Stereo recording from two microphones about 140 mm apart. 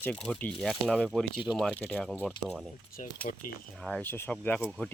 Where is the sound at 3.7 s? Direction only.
5° left (ahead or behind).